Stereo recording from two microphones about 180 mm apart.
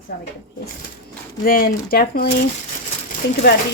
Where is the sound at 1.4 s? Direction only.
55° left (ahead or behind).